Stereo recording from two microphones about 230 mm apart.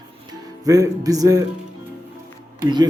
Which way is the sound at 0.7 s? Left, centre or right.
Centre.